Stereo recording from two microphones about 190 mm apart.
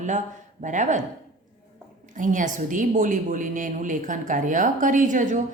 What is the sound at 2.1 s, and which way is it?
A woman's voice, 40° right (ahead or behind).